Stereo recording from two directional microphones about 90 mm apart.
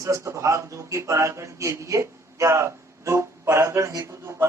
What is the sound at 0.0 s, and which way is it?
Speech, 35° right (ahead or behind).